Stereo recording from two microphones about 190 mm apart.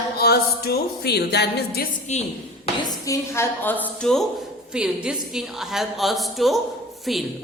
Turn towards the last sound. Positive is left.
turn(degrees=0)  # may be behind; listen again after turning